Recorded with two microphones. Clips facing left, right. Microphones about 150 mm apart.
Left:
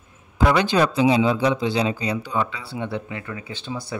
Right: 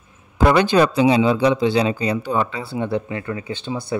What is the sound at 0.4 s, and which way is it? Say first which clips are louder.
Speech: right 4 dB; 50° right (ahead or behind).